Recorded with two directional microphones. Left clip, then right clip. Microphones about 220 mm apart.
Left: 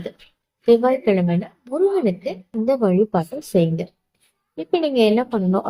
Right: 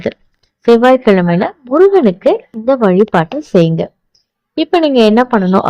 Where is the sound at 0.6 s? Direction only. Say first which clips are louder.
Right 8 dB; 35° right (ahead or behind).